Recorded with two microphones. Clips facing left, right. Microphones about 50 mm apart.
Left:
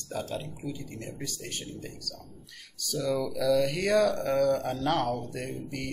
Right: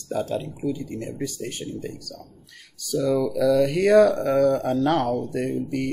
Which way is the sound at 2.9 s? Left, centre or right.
Right.